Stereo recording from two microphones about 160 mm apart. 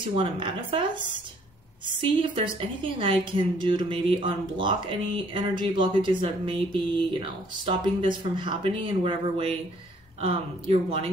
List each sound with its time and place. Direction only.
0.1 s a woman's voice: 35° right (ahead or behind)
2.0 s a woman's voice: 30° right (ahead or behind)